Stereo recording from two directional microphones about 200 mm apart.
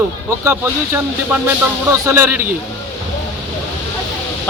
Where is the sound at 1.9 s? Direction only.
10° right (ahead or behind).